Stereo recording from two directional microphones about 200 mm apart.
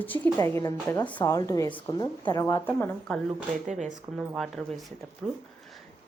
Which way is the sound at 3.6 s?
40° right (ahead or behind).